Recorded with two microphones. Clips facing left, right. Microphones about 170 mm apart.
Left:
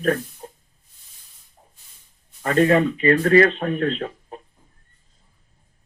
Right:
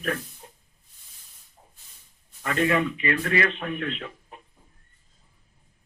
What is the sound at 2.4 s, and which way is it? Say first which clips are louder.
Speech: left 7 dB; 40° left (ahead or behind).